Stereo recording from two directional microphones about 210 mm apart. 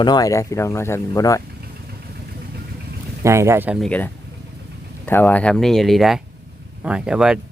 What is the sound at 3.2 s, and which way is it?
Speech, 15° right (ahead or behind).